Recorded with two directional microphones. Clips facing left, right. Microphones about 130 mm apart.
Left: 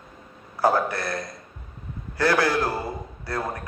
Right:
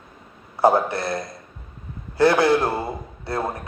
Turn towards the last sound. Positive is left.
turn(degrees=-25)  # may be behind; listen again after turning